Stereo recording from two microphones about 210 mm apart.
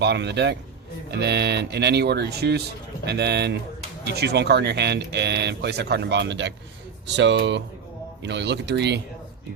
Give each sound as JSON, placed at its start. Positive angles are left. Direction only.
{"t": 0.0, "sound": "speech", "side_deg": -55}